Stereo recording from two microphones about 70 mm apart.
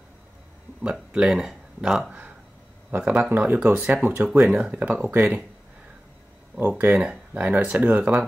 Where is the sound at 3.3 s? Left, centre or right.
Right.